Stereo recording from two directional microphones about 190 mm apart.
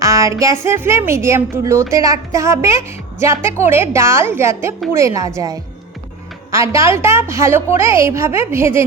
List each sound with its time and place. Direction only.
0.0 s a woman's voice: 15° right (ahead or behind)